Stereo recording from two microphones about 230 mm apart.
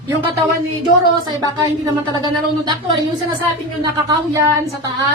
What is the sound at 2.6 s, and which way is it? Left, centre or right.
A woman's voice, centre.